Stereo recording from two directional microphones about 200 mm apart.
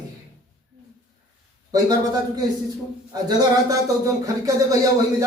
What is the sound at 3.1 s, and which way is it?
Speech, 15° right (ahead or behind).